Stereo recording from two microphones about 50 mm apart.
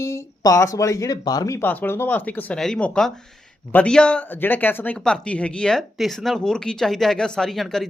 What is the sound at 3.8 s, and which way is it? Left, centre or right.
Speech, left.